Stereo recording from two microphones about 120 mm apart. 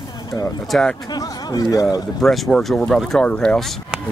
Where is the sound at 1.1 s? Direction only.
30° left (ahead or behind).